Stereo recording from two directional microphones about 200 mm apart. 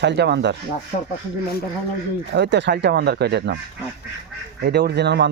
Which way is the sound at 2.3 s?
60° right (ahead or behind).